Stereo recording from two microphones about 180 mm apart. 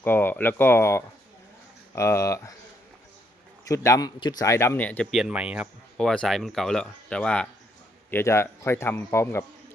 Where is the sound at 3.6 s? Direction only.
15° left (ahead or behind).